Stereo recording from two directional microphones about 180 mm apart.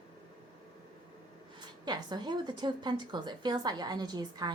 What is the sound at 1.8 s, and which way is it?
A woman's voice, 25° right (ahead or behind).